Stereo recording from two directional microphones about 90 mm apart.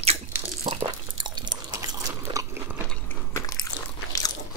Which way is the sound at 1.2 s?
55° right (ahead or behind).